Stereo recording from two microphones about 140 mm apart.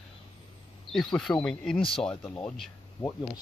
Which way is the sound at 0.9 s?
5° left (ahead or behind).